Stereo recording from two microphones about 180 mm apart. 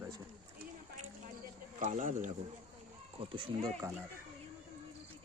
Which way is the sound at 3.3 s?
30° right (ahead or behind).